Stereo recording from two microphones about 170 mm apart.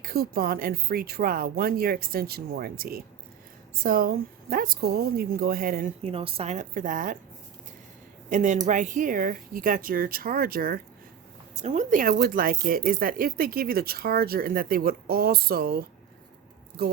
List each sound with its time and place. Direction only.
0.0 s speech: 65° right (ahead or behind)
6.0 s a woman's voice: 35° right (ahead or behind); by 7.2 s 50° right (ahead or behind)
8.3 s speech: 45° right (ahead or behind)
11.5 s speech: 40° right (ahead or behind); by 15.8 s 65° right (ahead or behind)